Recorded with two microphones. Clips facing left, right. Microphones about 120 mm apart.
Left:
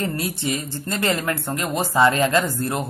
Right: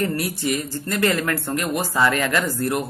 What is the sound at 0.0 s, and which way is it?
Speech, 25° left (ahead or behind).